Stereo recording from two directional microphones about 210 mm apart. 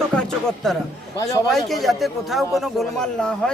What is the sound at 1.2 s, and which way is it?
Speech, 15° left (ahead or behind).